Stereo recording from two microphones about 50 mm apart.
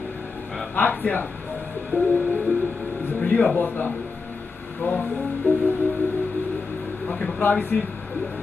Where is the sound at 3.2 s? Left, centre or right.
Left.